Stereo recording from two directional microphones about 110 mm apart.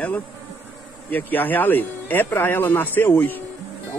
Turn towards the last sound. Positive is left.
turn(degrees=20)  # may be behind; listen again after turning